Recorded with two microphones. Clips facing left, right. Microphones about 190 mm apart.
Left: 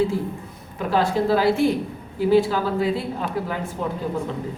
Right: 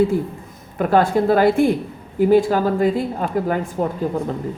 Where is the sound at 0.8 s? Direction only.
55° right (ahead or behind).